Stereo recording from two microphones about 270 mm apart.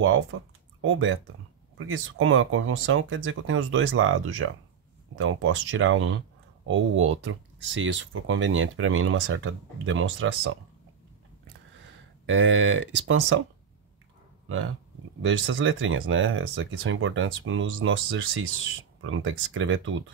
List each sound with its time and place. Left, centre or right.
0.0 s speech: right
12.3 s speech: right
15.2 s speech: right